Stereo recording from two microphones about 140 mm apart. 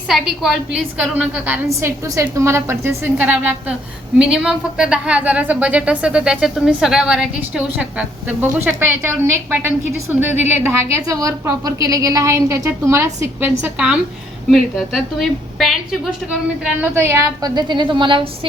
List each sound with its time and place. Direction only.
0.1 s a woman's voice: centre (ahead or behind)
1.6 s a woman's voice: 20° right (ahead or behind); by 16.0 s centre (ahead or behind)
16.6 s a woman's voice: 15° right (ahead or behind); by 18.3 s 35° right (ahead or behind)